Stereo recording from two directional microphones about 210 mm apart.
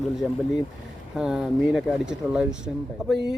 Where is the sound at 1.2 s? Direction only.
5° right (ahead or behind).